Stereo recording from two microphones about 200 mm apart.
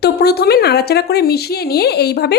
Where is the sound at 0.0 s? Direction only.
50° left (ahead or behind).